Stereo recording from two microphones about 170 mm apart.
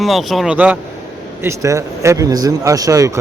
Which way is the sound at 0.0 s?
Centre (ahead or behind).